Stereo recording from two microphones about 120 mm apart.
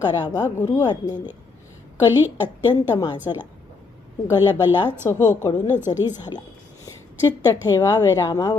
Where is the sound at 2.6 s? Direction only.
40° left (ahead or behind).